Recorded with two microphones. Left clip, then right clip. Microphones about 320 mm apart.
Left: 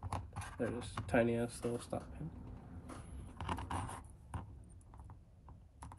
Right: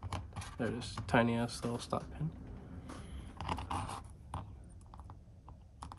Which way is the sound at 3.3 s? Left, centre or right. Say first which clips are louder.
Right 3 dB; centre.